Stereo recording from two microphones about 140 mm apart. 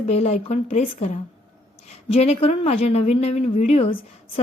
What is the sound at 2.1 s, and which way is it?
A woman's voice, 50° left (ahead or behind).